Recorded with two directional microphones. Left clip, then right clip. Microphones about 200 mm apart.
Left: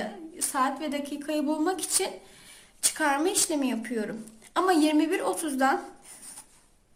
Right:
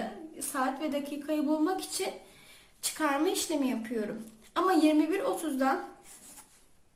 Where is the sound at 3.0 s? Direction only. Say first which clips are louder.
Left 3 dB; 35° left (ahead or behind).